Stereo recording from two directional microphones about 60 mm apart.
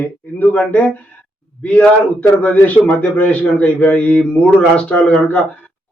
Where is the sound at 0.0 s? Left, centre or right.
Left.